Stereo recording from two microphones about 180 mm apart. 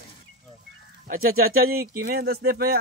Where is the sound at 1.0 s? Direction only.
55° right (ahead or behind).